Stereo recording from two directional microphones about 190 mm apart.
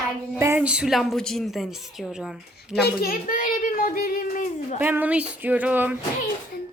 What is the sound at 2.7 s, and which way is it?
A child's voice, 55° left (ahead or behind).